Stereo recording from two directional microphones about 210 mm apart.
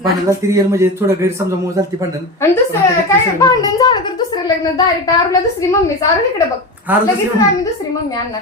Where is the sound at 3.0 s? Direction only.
15° left (ahead or behind).